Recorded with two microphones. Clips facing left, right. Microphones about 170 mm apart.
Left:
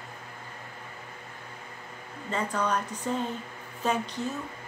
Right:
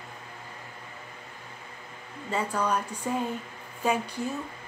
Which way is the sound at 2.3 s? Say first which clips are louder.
Right 1 dB; 10° right (ahead or behind).